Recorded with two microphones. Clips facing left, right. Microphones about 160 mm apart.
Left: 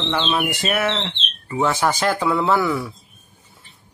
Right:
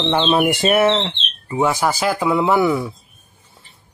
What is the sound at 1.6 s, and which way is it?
Speech, 10° right (ahead or behind).